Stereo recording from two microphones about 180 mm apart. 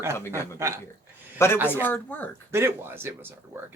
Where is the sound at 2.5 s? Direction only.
15° right (ahead or behind).